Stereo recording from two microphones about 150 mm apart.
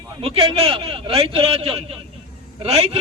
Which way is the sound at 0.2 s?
40° right (ahead or behind).